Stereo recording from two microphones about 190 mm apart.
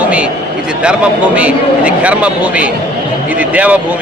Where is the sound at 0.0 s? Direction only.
5° right (ahead or behind).